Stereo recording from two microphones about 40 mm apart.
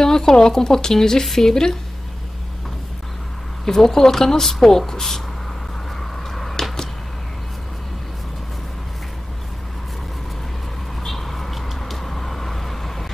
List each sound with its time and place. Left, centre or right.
0.0 s speech: centre
3.6 s speech: centre
5.9 s arrow: centre
11.0 s vehicle: centre